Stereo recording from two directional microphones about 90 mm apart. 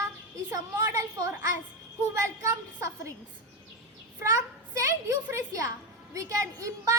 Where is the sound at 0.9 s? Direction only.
35° right (ahead or behind).